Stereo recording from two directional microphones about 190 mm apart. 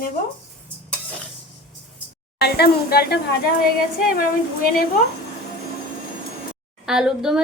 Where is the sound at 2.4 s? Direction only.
55° left (ahead or behind).